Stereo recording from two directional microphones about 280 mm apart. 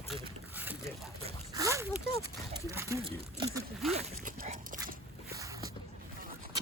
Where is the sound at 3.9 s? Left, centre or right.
Right.